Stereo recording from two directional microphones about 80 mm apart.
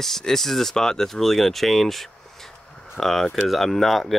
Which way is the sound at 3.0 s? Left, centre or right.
Centre.